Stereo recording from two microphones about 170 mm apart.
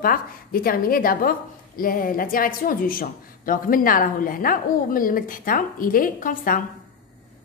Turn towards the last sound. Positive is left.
turn(degrees=55)  # may be behind; listen again after turning